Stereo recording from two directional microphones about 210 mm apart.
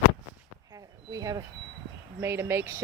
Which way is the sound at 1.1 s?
15° right (ahead or behind).